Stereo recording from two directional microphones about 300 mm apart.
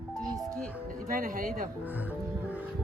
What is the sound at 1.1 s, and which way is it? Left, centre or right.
Speech, right.